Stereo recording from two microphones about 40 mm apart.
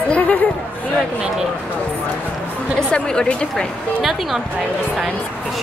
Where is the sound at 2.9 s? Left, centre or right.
Left.